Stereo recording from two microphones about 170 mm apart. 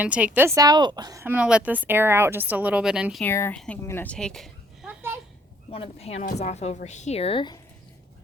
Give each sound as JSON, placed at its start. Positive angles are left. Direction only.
{"t": 0.0, "sound": "a woman's voice", "side_deg": -10}
{"t": 3.2, "sound": "a child's voice", "side_deg": 15}
{"t": 5.7, "sound": "a woman's voice", "side_deg": 35}